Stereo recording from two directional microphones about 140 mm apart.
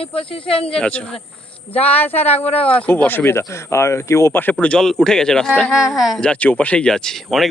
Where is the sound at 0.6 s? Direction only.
5° left (ahead or behind).